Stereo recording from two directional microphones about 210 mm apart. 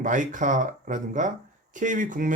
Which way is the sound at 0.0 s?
35° right (ahead or behind).